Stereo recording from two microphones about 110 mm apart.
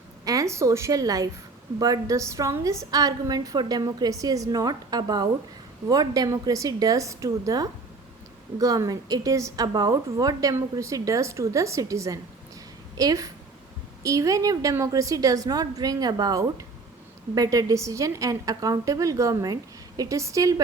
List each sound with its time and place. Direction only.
0.3 s a woman's voice: 30° right (ahead or behind)